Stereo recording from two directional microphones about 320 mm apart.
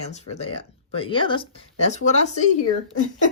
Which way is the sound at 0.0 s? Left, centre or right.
Centre.